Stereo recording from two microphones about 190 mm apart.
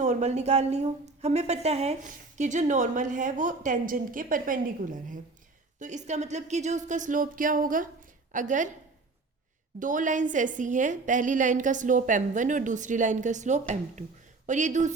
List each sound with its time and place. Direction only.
0.0 s a woman's voice: 40° right (ahead or behind)
9.8 s a woman's voice: 45° right (ahead or behind)